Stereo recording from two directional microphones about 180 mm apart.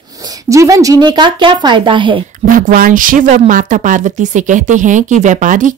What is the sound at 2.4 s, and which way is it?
Speech, 50° right (ahead or behind).